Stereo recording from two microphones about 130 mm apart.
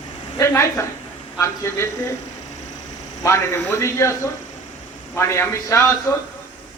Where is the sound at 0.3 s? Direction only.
20° left (ahead or behind).